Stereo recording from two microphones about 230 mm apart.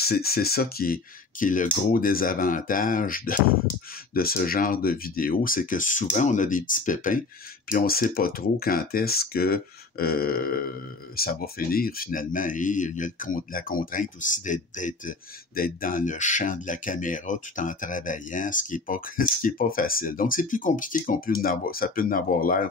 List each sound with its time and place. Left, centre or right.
0.0 s speech: left